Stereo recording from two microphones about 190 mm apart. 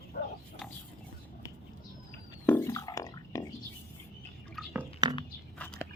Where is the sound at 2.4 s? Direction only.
10° left (ahead or behind).